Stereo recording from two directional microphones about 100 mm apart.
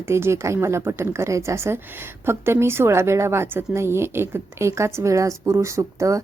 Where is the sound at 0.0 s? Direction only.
25° right (ahead or behind).